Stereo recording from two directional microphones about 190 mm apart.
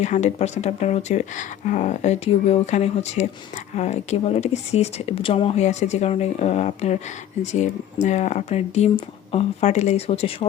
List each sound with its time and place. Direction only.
0.0 s speech: 35° left (ahead or behind)